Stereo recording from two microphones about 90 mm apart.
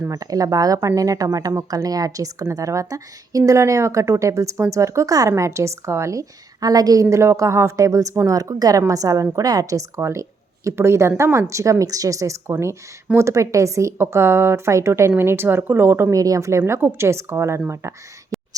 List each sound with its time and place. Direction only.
0.1 s a woman's voice: 40° right (ahead or behind)
16.1 s a woman's voice: 40° right (ahead or behind)
18.3 s a sound: centre (ahead or behind)